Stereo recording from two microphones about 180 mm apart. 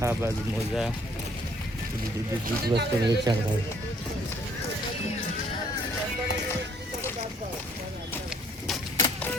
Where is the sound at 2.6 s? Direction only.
65° right (ahead or behind).